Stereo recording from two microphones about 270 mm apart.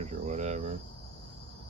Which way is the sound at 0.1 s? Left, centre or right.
Right.